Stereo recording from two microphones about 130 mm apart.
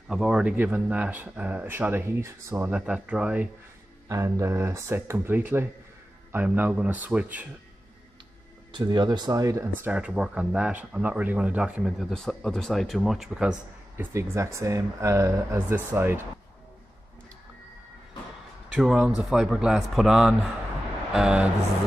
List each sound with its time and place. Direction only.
0.1 s speech: 5° right (ahead or behind)
4.1 s speech: 25° right (ahead or behind)
8.7 s speech: 35° right (ahead or behind)
9.8 s speech: 10° right (ahead or behind)
13.9 s speech: 20° right (ahead or behind)
18.7 s a man's voice: 5° right (ahead or behind)